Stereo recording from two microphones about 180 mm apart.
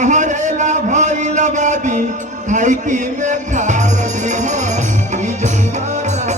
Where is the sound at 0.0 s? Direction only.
45° right (ahead or behind).